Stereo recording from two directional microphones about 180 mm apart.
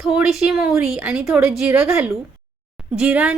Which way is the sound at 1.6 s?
15° right (ahead or behind).